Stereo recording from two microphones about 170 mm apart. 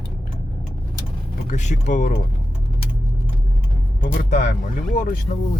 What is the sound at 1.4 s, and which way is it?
Speech, 45° left (ahead or behind).